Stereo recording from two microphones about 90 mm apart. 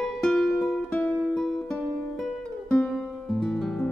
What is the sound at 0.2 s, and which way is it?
Music, 5° left (ahead or behind).